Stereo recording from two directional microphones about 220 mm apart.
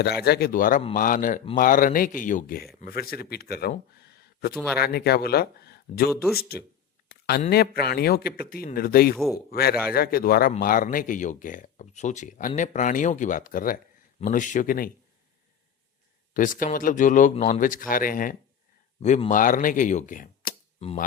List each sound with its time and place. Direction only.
0.0 s speech: 45° left (ahead or behind)
7.1 s a sound: 45° left (ahead or behind)
7.5 s speech: 45° left (ahead or behind)
16.3 s speech: 40° left (ahead or behind)